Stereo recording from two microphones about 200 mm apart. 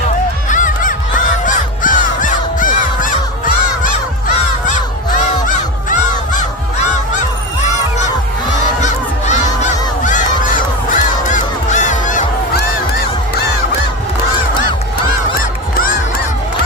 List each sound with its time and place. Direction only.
0.4 s crow: 40° left (ahead or behind)
4.7 s crow: 40° left (ahead or behind)
8.8 s a sound: 35° left (ahead or behind)
10.0 s honk: 40° left (ahead or behind)
15.4 s honk: 45° left (ahead or behind)